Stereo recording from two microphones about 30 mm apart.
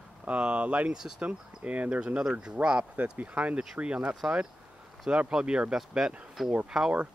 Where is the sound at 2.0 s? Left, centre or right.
Right.